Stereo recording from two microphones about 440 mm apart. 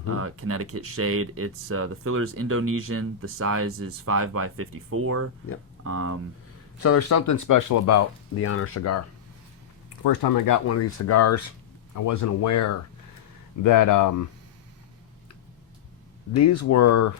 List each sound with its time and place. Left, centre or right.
0.2 s speech: right
6.8 s speech: left
10.0 s speech: left
16.3 s speech: left